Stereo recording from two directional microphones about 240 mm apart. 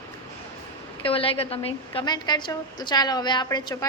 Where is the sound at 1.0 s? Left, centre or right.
Left.